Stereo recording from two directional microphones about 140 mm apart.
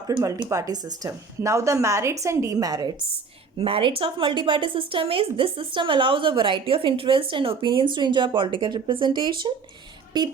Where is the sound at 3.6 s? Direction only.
40° right (ahead or behind).